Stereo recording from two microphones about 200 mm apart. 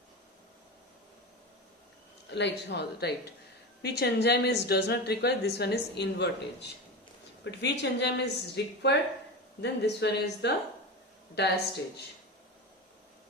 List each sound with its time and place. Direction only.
2.3 s speech: 60° left (ahead or behind)